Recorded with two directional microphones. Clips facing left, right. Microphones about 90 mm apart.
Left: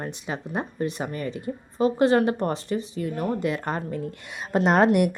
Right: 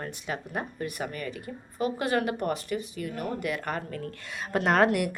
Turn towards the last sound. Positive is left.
turn(degrees=25)  # may be behind; listen again after turning